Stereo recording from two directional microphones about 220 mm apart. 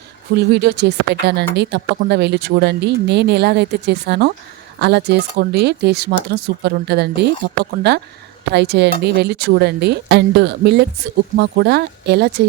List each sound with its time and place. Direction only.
0.3 s speech: 50° right (ahead or behind)